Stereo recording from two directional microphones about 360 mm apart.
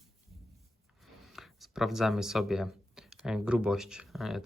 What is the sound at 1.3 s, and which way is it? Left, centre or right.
Speech, centre.